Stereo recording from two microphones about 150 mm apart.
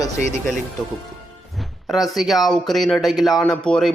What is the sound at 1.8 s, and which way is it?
Speech, centre (ahead or behind).